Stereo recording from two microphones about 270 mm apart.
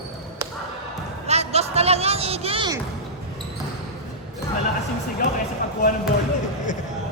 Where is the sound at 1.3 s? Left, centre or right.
Right.